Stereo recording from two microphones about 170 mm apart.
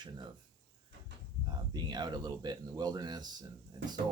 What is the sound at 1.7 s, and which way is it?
Speech, 25° right (ahead or behind).